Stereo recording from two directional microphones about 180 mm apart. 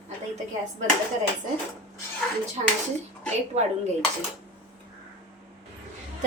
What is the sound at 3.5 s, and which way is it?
Speech, 35° right (ahead or behind).